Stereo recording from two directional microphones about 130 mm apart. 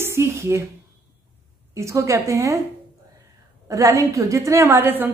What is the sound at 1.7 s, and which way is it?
Speech, 20° right (ahead or behind).